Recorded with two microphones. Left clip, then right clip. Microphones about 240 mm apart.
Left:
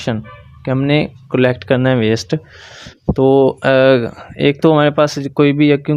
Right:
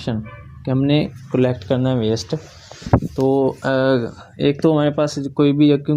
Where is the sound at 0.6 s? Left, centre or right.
Left.